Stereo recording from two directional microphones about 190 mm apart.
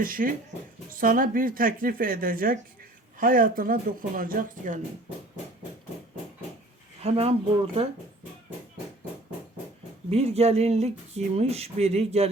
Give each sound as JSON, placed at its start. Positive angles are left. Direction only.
{"t": 0.0, "sound": "speech", "side_deg": -45}
{"t": 7.0, "sound": "a sound", "side_deg": -30}
{"t": 10.1, "sound": "speech", "side_deg": -35}